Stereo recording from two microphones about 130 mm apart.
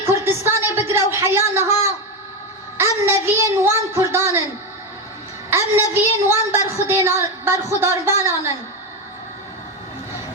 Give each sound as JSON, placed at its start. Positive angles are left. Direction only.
{"t": 0.0, "sound": "a sound", "side_deg": -20}
{"t": 3.1, "sound": "a woman's voice", "side_deg": -20}
{"t": 5.5, "sound": "a woman's voice", "side_deg": -20}